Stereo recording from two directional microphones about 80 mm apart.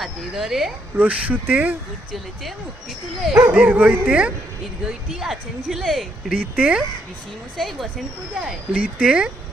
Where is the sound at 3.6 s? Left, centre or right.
Centre.